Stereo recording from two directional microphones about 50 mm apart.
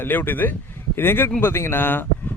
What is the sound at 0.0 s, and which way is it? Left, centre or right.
Speech, left.